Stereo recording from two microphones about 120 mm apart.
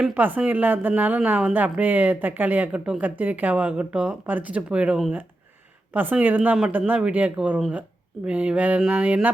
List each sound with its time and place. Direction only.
0.0 s a woman's voice: 15° right (ahead or behind)